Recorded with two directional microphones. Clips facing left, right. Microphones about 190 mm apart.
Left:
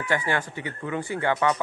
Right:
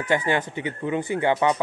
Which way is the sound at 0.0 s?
20° right (ahead or behind).